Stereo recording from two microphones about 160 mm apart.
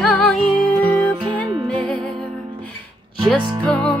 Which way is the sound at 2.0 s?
5° left (ahead or behind).